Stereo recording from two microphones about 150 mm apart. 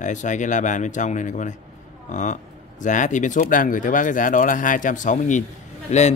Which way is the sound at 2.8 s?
55° left (ahead or behind).